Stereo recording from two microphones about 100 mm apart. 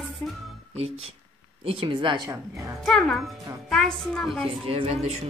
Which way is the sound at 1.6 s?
65° right (ahead or behind).